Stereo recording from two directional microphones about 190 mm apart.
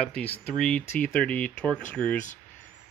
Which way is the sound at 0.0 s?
5° left (ahead or behind).